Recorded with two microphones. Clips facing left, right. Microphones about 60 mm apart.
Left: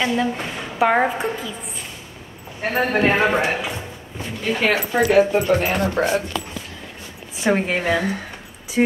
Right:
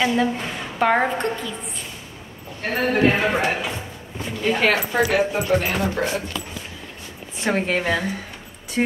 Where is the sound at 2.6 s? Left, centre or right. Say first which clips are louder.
Even; left.